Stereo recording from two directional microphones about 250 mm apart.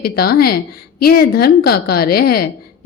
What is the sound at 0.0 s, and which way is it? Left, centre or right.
A woman's voice, left.